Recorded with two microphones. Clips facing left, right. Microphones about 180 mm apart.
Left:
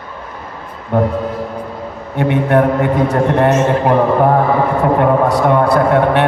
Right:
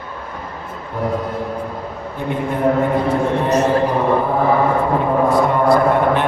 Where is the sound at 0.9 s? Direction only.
70° left (ahead or behind).